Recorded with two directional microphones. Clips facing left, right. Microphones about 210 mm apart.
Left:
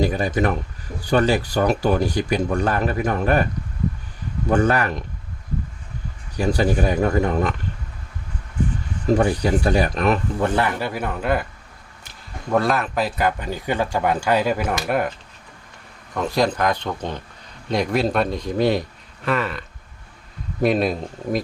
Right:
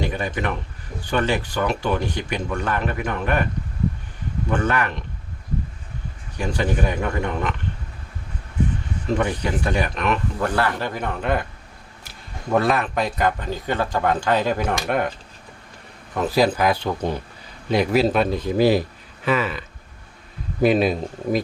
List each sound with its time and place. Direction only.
0.0 s speech: 35° left (ahead or behind)
4.4 s speech: 35° left (ahead or behind)
6.3 s speech: 35° left (ahead or behind)
9.1 s speech: 35° left (ahead or behind)
10.4 s speech: 20° left (ahead or behind)
12.5 s speech: centre (ahead or behind)
16.1 s speech: 5° right (ahead or behind)